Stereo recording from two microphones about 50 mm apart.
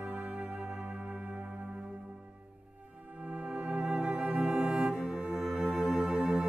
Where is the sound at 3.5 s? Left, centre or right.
Right.